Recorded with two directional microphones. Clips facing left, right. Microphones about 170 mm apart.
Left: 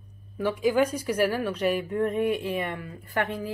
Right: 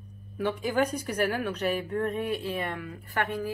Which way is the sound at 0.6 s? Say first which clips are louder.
Left 6 dB; 10° left (ahead or behind).